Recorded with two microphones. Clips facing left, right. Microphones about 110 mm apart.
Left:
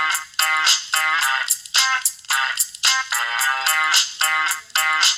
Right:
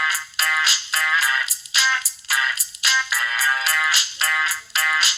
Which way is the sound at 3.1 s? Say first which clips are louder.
Even; 55° left (ahead or behind).